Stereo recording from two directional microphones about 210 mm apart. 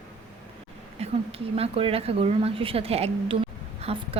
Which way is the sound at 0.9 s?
30° right (ahead or behind).